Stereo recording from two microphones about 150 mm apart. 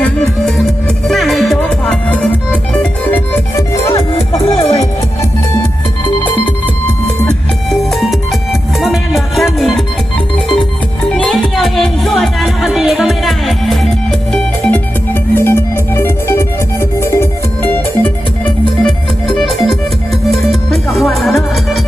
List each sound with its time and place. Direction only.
0.0 s music: 5° left (ahead or behind)
3.9 s music: 40° left (ahead or behind)
7.3 s music: centre (ahead or behind)
10.3 s organ: 5° left (ahead or behind)
11.1 s music: 5° left (ahead or behind)